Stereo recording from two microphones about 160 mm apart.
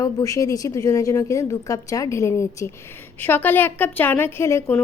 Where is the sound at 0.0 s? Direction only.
20° left (ahead or behind).